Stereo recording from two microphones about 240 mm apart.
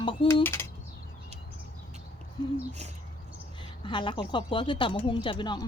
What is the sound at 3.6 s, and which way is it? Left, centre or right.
Speech, centre.